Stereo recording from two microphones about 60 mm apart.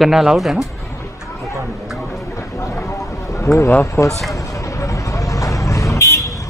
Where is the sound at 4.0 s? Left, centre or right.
Left.